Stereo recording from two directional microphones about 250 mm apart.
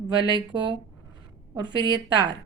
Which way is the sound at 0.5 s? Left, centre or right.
Centre.